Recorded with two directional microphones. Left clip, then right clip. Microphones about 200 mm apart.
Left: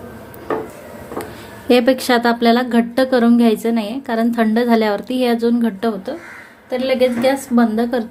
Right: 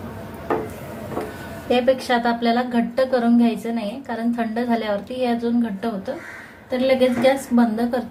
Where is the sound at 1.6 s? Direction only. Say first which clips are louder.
Left 5 dB; 55° left (ahead or behind).